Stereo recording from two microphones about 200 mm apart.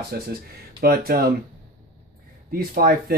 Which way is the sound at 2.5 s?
45° right (ahead or behind).